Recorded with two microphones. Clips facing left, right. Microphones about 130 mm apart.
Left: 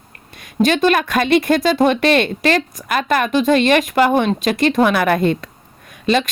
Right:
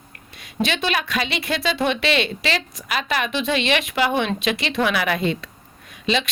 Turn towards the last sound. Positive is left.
turn(degrees=50)  # may be behind; listen again after turning